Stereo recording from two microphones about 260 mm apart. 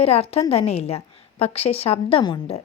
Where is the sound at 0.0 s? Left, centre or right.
Left.